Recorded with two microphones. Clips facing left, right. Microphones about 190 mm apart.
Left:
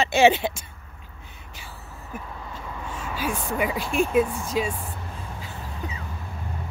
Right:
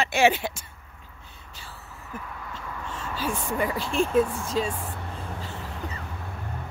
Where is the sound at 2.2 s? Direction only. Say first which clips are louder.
Left 1 dB; 25° left (ahead or behind).